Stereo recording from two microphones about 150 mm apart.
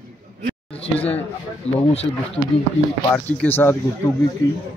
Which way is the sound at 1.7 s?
45° left (ahead or behind).